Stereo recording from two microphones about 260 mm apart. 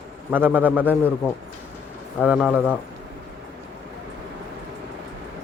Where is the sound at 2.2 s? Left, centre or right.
Centre.